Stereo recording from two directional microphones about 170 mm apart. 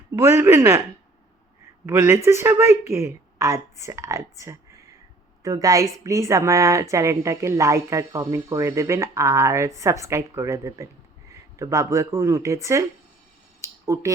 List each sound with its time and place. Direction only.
0.2 s a woman's voice: 15° right (ahead or behind)
1.9 s a woman's voice: 15° right (ahead or behind)
13.6 s a sound: 15° right (ahead or behind)